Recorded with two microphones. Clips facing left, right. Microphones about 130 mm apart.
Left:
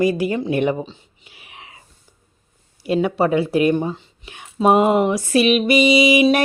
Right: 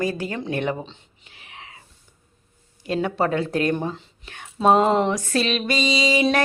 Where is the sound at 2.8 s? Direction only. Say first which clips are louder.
Left 4 dB; 10° left (ahead or behind).